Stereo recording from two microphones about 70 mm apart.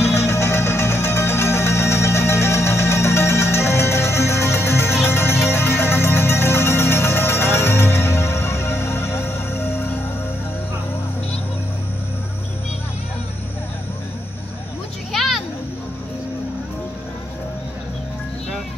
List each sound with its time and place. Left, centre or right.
0.1 s music: left
15.1 s children playing: centre